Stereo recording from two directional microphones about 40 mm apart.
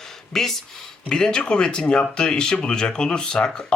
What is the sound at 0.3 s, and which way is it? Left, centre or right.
Speech, centre.